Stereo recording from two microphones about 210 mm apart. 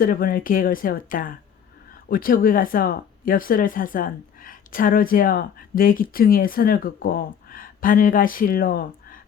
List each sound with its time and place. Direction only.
0.0 s speech: 40° left (ahead or behind)